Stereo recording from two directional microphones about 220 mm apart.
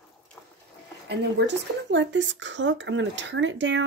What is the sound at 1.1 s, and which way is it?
Speech, 50° right (ahead or behind).